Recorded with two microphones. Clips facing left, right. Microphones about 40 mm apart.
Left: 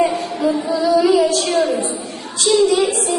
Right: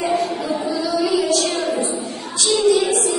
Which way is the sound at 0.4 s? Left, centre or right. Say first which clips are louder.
Left 4 dB; left.